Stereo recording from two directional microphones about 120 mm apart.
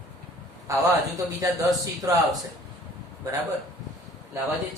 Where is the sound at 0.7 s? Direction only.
25° right (ahead or behind).